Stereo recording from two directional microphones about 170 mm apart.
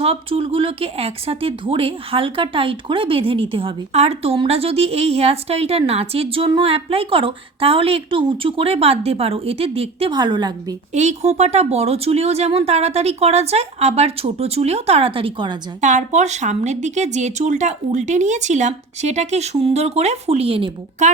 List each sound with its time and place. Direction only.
0.0 s speech: 35° right (ahead or behind)
10.9 s speech: 40° right (ahead or behind)
15.8 s speech: 45° right (ahead or behind)